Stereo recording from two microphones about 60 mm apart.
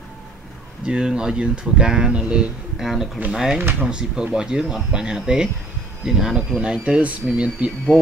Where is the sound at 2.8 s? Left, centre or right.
Centre.